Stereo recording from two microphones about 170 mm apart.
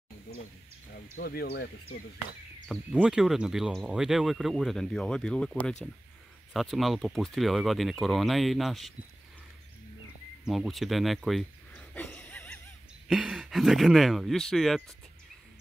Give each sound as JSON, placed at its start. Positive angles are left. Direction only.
{"t": 1.1, "sound": "speech", "side_deg": 65}
{"t": 2.7, "sound": "speech", "side_deg": -5}
{"t": 10.4, "sound": "a sound", "side_deg": 0}
{"t": 13.1, "sound": "speech", "side_deg": -5}